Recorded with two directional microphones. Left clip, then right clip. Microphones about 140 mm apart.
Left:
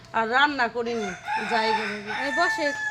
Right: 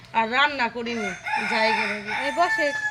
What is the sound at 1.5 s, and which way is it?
Chicken, 30° left (ahead or behind).